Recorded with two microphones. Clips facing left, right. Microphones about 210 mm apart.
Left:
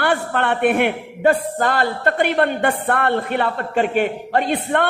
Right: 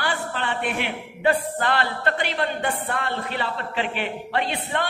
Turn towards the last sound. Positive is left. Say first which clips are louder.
# left 7 dB
turn(degrees=50)  # may be behind; listen again after turning